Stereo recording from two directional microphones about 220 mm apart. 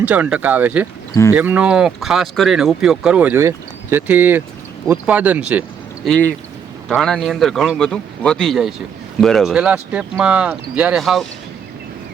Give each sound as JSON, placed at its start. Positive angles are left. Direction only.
{"t": 0.0, "sound": "speech", "side_deg": -5}
{"t": 6.1, "sound": "speech", "side_deg": 5}